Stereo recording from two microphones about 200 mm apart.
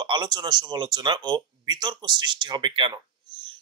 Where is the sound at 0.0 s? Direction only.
25° right (ahead or behind).